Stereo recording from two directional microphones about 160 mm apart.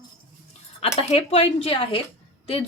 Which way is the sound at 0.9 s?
40° left (ahead or behind).